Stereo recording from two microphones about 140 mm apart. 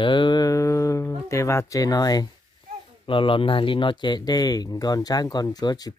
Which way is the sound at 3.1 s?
40° left (ahead or behind).